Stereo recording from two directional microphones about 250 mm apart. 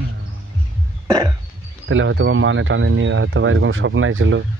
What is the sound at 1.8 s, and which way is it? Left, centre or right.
Speech, right.